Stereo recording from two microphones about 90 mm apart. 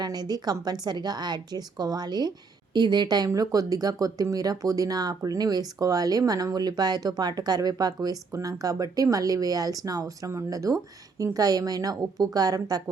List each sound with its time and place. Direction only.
0.0 s speech: 50° right (ahead or behind)